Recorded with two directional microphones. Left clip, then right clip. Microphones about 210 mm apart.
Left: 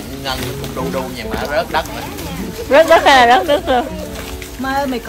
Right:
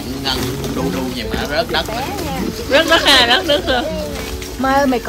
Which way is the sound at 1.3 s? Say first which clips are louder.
Left 1 dB; 30° left (ahead or behind).